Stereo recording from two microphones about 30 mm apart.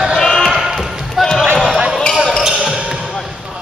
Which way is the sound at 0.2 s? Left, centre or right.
Centre.